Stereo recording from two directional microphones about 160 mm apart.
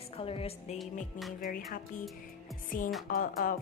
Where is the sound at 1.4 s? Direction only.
60° left (ahead or behind).